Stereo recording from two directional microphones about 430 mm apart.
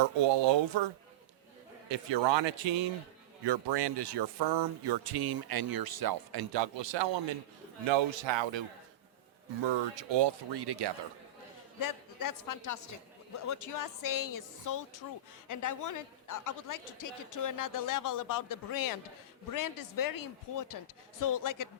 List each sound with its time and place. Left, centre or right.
0.0 s speech: right
1.9 s speech: right
3.4 s speech: right
9.6 s speech: right
11.8 s a man's voice: left